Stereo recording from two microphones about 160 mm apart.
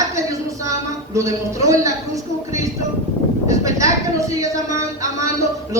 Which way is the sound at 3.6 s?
20° right (ahead or behind).